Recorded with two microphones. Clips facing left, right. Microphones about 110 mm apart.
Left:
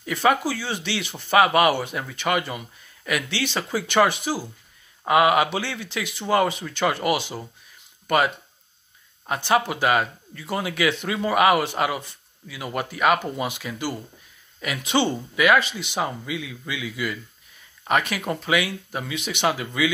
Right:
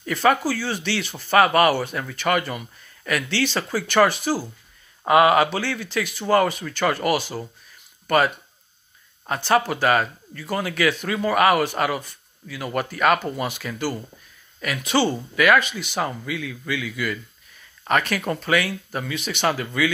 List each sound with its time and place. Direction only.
0.0 s speech: 15° left (ahead or behind)
9.3 s speech: 15° left (ahead or behind)